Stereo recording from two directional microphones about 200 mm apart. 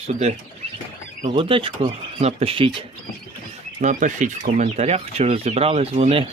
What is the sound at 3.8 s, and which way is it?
Speech, 40° right (ahead or behind).